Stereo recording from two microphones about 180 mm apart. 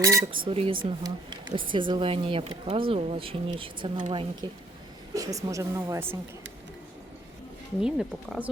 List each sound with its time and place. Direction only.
0.0 s speech: 15° right (ahead or behind)
0.4 s speech: 30° right (ahead or behind); by 6.1 s 10° right (ahead or behind)
7.8 s speech: 5° right (ahead or behind)